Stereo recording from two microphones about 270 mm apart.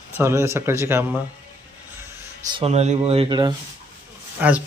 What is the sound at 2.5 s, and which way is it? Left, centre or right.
A man's voice, right.